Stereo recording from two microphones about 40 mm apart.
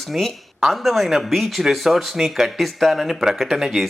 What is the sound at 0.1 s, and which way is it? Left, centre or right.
Speech, centre.